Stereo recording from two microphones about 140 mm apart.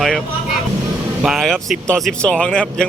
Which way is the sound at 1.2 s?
Centre (ahead or behind).